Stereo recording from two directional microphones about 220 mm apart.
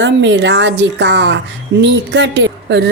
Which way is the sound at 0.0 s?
55° right (ahead or behind).